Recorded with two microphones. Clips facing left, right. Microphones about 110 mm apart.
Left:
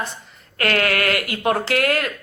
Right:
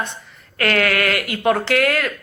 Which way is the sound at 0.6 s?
45° left (ahead or behind).